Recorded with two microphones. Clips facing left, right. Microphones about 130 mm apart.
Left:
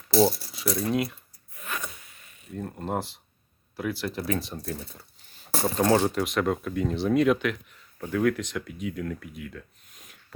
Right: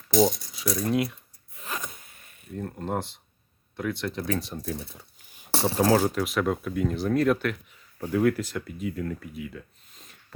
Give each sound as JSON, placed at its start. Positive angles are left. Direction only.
{"t": 0.2, "sound": "speech", "side_deg": 5}
{"t": 1.5, "sound": "zipper", "side_deg": -35}
{"t": 1.9, "sound": "zipper", "side_deg": -45}
{"t": 2.5, "sound": "speech", "side_deg": 5}
{"t": 4.9, "sound": "a sound", "side_deg": -15}
{"t": 5.5, "sound": "a sound", "side_deg": -30}
{"t": 5.7, "sound": "speech", "side_deg": -5}